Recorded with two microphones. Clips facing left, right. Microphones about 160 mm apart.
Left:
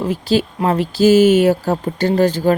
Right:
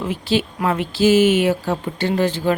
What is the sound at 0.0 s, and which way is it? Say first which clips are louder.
Speech: left 4 dB; 40° left (ahead or behind).